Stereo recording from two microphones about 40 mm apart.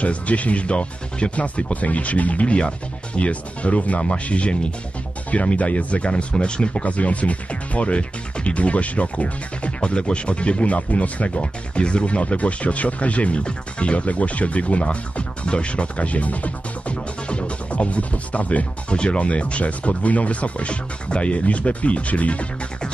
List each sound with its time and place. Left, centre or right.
0.0 s speech: left
6.8 s speech: left